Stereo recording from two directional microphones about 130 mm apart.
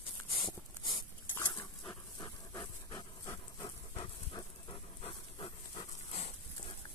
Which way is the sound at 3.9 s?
45° left (ahead or behind).